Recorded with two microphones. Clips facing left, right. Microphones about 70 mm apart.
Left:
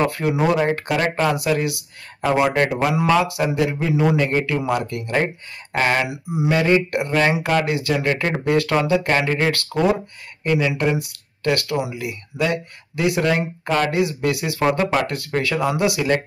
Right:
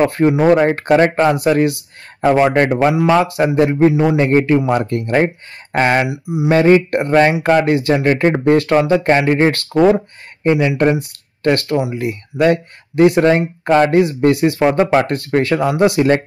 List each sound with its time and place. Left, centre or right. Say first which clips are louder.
0.0 s speech: right 7 dB; right
6.0 s speech: right 4 dB; centre
6.5 s speech: right 7 dB; right